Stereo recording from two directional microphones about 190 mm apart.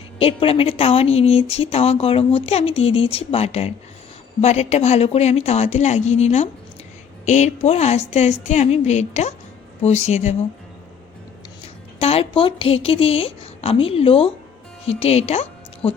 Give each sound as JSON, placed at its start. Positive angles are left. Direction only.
{"t": 0.2, "sound": "speech", "side_deg": 30}
{"t": 11.6, "sound": "a woman's voice", "side_deg": 30}